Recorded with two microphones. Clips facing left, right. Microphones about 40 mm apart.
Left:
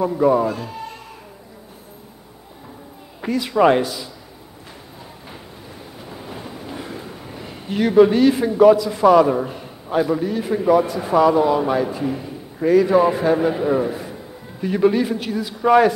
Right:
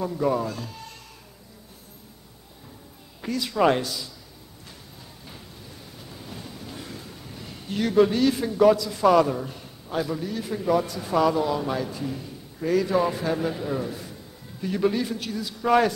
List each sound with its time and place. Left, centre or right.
0.0 s a man's voice: centre
3.2 s a man's voice: left
5.9 s a sound: left
8.6 s a man's voice: centre